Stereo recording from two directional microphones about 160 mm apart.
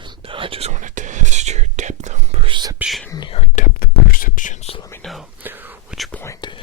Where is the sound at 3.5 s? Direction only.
65° left (ahead or behind).